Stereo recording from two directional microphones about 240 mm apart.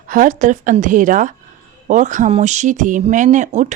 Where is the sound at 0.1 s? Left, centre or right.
Right.